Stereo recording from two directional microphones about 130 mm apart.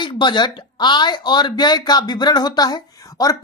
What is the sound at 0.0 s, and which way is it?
Speech, 35° left (ahead or behind).